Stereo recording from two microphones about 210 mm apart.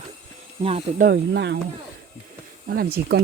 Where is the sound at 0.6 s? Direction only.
30° right (ahead or behind).